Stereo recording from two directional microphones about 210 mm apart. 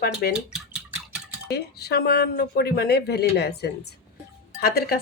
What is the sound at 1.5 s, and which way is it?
Speech, 50° left (ahead or behind).